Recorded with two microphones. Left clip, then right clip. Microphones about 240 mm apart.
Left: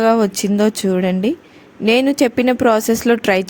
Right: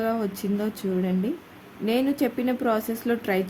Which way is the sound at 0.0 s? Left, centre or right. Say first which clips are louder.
Left 13 dB; left.